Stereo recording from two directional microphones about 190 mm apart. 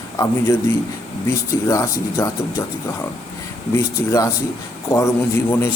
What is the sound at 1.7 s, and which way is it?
Speech, 15° left (ahead or behind).